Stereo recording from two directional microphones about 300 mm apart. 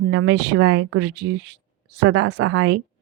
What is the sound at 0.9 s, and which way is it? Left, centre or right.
Speech, right.